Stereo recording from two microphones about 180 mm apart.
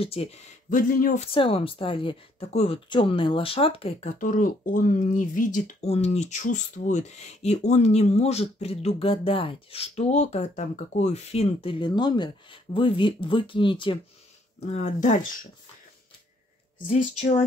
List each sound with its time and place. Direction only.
0.0 s speech: 35° left (ahead or behind); by 1.2 s 50° left (ahead or behind)
1.2 s speech: 30° left (ahead or behind)
4.2 s speech: 45° left (ahead or behind); by 13.9 s 25° left (ahead or behind)
14.6 s speech: 40° left (ahead or behind)
16.8 s speech: 40° left (ahead or behind)